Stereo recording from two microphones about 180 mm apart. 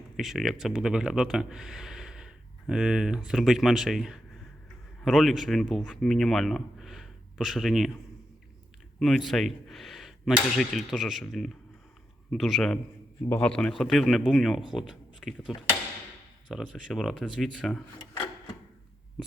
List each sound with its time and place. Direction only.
0.2 s speech: centre (ahead or behind)
9.0 s a man's voice: centre (ahead or behind)